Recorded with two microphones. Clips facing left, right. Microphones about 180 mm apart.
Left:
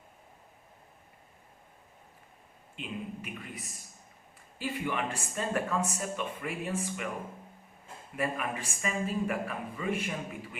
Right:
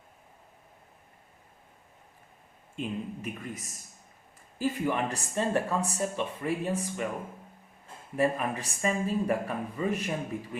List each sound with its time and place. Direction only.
2.7 s speech: 40° right (ahead or behind)
8.1 s speech: 35° right (ahead or behind)